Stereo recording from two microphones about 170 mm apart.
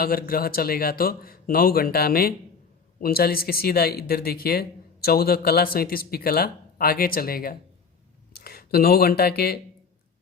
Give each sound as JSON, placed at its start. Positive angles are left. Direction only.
{"t": 0.0, "sound": "speech", "side_deg": 60}